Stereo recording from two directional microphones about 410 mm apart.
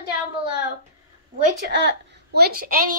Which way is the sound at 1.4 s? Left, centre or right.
Right.